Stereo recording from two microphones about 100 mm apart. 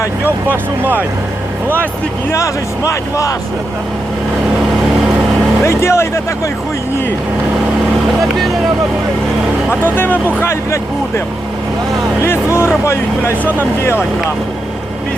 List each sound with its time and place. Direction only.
0.3 s speech: 20° right (ahead or behind)
2.3 s speech: 30° left (ahead or behind)
5.6 s speech: 25° left (ahead or behind)
9.8 s speech: 20° left (ahead or behind)
12.2 s speech: 25° left (ahead or behind)